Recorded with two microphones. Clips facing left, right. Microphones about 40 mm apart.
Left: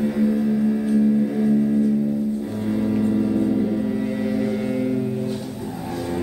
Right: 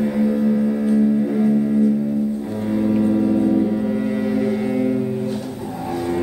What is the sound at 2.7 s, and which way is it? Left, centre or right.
Music, centre.